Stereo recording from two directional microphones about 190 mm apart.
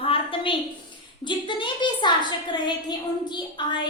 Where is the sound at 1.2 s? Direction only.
25° left (ahead or behind).